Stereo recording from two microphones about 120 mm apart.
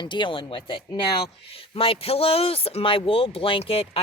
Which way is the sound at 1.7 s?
50° left (ahead or behind).